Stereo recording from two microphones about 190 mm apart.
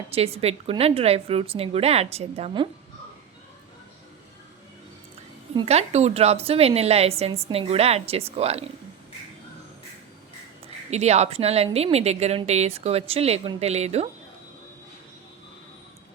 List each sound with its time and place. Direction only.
0.1 s a woman's voice: 30° right (ahead or behind)
5.5 s a woman's voice: 35° right (ahead or behind)
10.9 s a woman's voice: 35° right (ahead or behind)